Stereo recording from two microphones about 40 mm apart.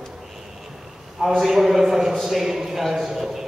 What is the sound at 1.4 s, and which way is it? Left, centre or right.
A man's voice, centre.